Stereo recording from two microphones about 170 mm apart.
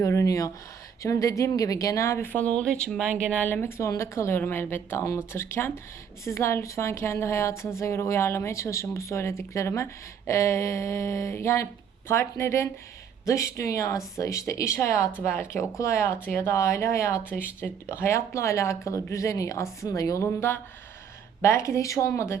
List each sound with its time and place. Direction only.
0.0 s a woman's voice: 20° left (ahead or behind)